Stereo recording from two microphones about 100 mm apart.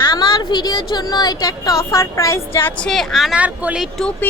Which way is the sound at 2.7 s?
5° left (ahead or behind).